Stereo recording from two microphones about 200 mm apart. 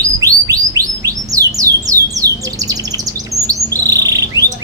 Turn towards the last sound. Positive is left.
turn(degrees=-15)  # may be behind; listen again after turning